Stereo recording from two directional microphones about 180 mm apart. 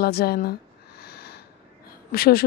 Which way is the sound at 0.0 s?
60° left (ahead or behind).